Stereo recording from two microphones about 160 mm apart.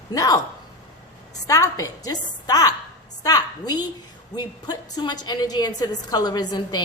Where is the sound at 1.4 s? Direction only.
20° left (ahead or behind).